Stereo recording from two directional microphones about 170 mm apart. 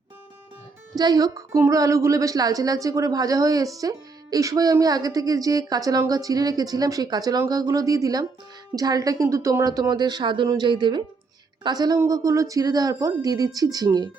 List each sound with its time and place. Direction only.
0.9 s a woman's voice: 20° right (ahead or behind)